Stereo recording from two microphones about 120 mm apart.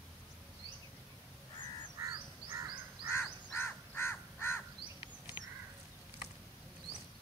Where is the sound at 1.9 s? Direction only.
25° right (ahead or behind).